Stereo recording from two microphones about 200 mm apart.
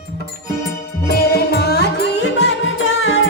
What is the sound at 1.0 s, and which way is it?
Music, 50° left (ahead or behind).